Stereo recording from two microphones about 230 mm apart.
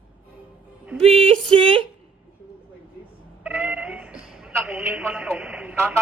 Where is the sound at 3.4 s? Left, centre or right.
Centre.